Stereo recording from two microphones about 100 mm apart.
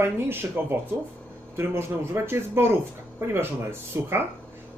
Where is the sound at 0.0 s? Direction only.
25° right (ahead or behind).